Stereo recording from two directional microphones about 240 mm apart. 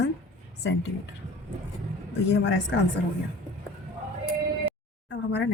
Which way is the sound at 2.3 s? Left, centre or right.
Left.